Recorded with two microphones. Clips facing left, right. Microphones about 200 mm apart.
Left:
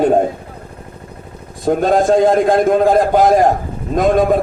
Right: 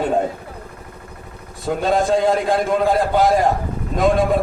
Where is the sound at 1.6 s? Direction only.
45° left (ahead or behind).